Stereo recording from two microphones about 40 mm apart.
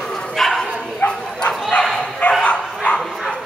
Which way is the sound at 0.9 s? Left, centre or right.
Left.